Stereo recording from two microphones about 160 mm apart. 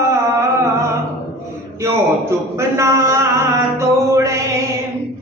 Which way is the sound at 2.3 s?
15° right (ahead or behind).